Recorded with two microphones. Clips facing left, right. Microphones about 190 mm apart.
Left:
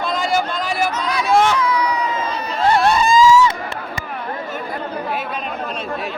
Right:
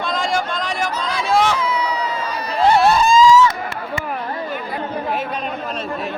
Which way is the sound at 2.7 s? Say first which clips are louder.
Even; centre (ahead or behind).